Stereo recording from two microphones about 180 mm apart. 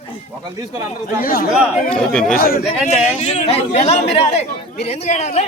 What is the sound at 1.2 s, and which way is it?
Speech, 55° left (ahead or behind).